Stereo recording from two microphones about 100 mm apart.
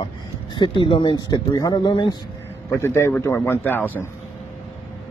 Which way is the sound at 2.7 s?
25° left (ahead or behind).